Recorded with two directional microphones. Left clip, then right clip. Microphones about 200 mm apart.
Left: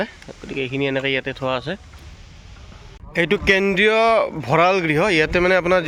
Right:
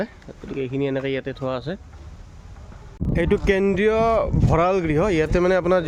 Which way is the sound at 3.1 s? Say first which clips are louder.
Left 3 dB; 15° right (ahead or behind).